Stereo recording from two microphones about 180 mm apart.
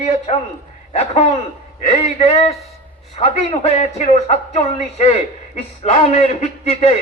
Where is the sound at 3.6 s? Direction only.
35° left (ahead or behind).